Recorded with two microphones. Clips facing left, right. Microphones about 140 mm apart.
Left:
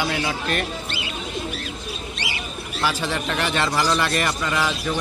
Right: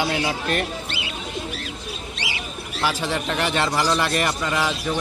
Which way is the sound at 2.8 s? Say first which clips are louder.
Even; 20° right (ahead or behind).